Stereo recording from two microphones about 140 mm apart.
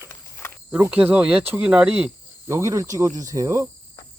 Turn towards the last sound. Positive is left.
turn(degrees=-25)  # may be behind; listen again after turning